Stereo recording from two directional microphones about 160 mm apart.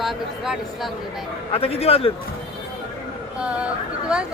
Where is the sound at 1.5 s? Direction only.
40° left (ahead or behind).